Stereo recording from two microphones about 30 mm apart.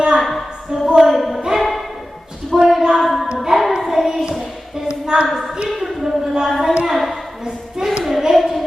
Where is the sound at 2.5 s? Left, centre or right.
Centre.